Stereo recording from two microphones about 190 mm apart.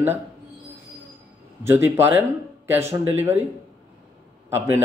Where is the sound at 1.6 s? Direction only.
10° right (ahead or behind).